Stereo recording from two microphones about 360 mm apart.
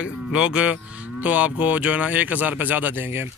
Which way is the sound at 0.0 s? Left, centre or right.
Centre.